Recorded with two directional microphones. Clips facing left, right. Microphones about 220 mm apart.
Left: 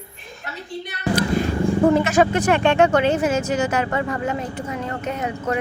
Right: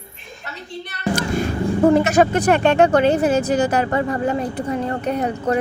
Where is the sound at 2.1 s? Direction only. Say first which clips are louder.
Right 2 dB; 40° right (ahead or behind).